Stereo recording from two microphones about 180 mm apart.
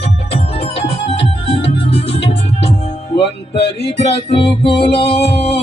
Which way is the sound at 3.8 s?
35° left (ahead or behind).